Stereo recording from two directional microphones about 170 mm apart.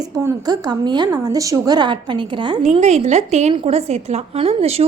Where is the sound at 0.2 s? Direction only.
20° right (ahead or behind).